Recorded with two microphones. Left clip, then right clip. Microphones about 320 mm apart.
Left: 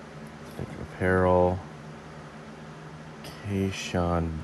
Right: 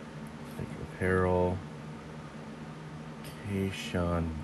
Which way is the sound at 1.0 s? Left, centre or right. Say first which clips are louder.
Left 6 dB; left.